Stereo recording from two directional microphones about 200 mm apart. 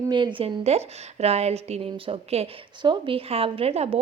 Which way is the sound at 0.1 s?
25° right (ahead or behind).